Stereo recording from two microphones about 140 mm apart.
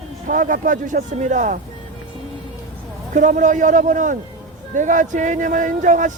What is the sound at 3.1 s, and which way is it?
Speech, 60° right (ahead or behind).